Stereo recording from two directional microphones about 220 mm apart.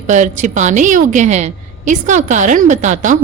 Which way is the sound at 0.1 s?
35° right (ahead or behind).